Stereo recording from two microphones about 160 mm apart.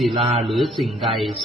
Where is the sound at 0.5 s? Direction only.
Centre (ahead or behind).